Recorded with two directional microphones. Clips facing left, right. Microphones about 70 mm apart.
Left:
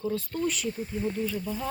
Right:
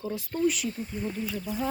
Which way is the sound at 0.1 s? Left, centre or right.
Centre.